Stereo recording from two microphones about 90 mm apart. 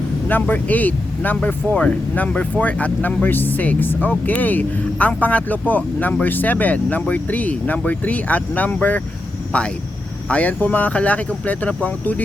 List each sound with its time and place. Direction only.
0.3 s speech: 20° left (ahead or behind)